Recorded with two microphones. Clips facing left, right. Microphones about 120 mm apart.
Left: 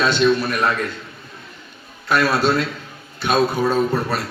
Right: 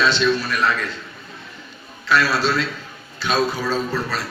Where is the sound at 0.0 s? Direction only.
50° left (ahead or behind).